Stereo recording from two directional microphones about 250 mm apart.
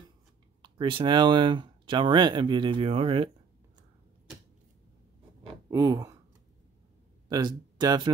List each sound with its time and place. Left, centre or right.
0.6 s speech: centre
5.7 s speech: centre
7.2 s speech: centre